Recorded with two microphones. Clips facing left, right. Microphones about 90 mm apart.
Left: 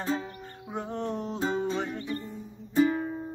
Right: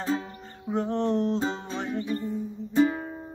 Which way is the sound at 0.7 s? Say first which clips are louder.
Right 7 dB; 10° left (ahead or behind).